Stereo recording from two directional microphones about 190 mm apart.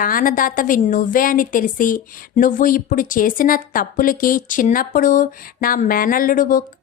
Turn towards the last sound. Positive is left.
turn(degrees=45)  # may be behind; listen again after turning